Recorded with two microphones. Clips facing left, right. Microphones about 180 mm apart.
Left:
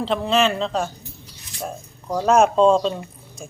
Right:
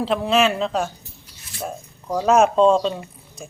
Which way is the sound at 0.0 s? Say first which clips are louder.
Right 1 dB; 5° right (ahead or behind).